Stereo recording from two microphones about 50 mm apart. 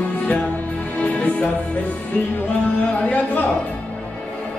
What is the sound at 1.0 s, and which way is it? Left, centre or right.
Music, left.